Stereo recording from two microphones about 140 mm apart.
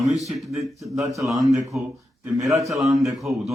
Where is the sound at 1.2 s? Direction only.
25° right (ahead or behind).